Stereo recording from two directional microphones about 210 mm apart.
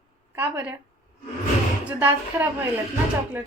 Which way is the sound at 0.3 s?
10° right (ahead or behind).